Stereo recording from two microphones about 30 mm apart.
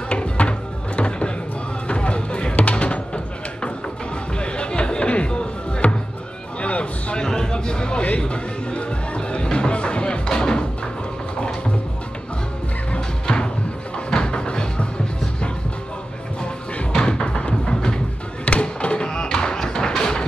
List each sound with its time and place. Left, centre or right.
0.5 s music: left
4.4 s music: left
7.2 s a sound: left
8.2 s music: left
10.2 s music: left
13.3 s music: left
16.9 s music: left
17.7 s music: left
18.4 s thump: left
20.0 s a sound: left